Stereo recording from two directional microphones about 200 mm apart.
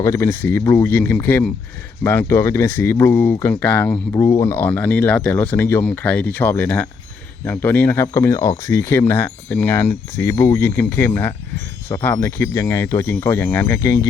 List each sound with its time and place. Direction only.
0.0 s speech: 15° left (ahead or behind)